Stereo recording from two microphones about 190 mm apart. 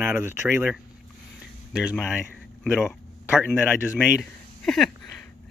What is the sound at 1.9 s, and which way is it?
Speech, centre (ahead or behind).